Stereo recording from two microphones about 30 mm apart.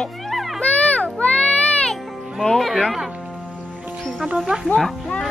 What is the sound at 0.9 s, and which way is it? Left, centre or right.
Child singing, left.